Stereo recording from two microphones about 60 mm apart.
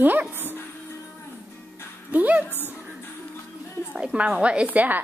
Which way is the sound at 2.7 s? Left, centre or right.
Right.